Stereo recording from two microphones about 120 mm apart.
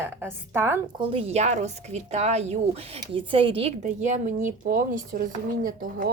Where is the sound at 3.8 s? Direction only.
90° right.